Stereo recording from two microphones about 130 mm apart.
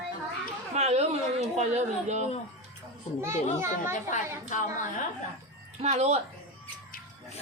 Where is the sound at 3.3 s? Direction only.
55° left (ahead or behind).